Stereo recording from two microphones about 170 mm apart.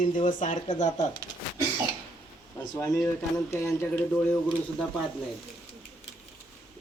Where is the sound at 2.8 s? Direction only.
15° left (ahead or behind).